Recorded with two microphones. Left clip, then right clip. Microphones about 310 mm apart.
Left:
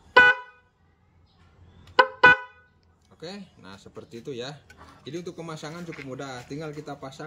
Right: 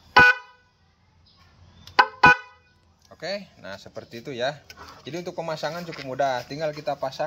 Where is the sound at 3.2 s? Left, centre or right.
Centre.